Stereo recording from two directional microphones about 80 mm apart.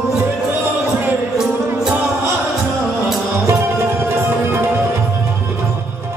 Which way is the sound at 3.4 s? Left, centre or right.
Right.